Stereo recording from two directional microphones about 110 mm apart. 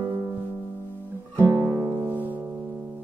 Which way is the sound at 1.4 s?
20° right (ahead or behind).